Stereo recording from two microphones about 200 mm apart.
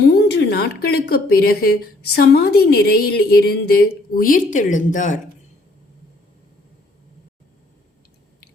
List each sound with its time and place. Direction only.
0.0 s speech: 55° left (ahead or behind); by 5.2 s 40° left (ahead or behind)